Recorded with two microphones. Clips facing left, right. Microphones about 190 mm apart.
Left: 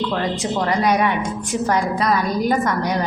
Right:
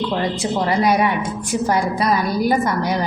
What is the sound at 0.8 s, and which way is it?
Speech, 5° right (ahead or behind).